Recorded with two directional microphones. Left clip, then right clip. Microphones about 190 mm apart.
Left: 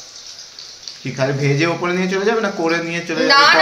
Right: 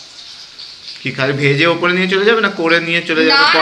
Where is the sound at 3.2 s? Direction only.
65° left (ahead or behind).